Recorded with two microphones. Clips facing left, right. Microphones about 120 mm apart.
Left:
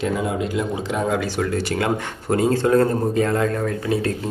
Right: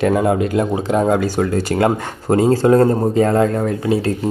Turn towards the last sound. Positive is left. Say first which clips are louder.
# right 4 dB
turn(degrees=-25)  # may be behind; listen again after turning